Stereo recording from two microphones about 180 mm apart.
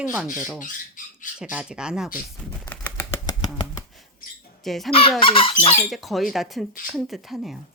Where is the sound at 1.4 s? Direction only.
5° right (ahead or behind).